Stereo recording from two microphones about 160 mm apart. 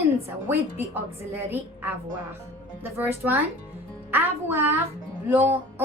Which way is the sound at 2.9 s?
15° right (ahead or behind).